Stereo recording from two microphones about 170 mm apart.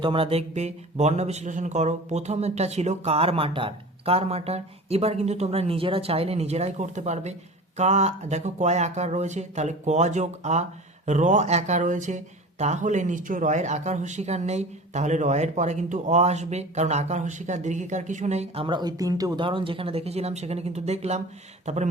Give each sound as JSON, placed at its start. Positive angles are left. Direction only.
{"t": 0.0, "sound": "speech", "side_deg": -30}